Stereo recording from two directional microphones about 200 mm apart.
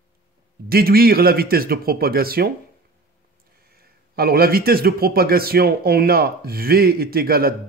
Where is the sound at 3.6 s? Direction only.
50° right (ahead or behind).